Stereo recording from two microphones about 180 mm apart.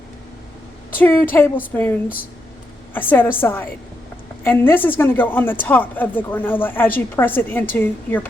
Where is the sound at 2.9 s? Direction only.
10° left (ahead or behind).